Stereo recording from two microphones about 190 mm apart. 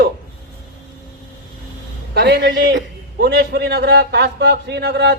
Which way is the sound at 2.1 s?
60° right (ahead or behind).